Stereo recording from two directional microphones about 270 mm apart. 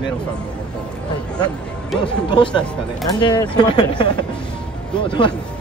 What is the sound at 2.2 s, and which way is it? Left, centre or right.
Speech, centre.